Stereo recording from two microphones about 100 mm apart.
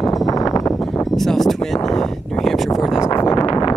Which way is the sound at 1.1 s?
5° left (ahead or behind).